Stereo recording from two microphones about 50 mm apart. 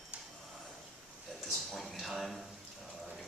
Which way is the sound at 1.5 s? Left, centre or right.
Centre.